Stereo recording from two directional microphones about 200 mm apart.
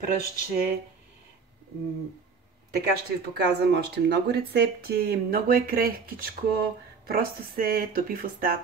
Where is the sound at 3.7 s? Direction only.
55° right (ahead or behind).